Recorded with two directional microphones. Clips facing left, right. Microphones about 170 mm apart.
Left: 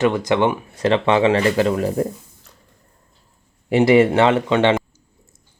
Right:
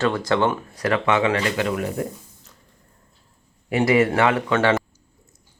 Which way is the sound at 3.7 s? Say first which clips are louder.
Left 5 dB; 25° left (ahead or behind).